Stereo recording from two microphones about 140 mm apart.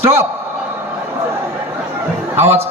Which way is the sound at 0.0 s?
15° right (ahead or behind).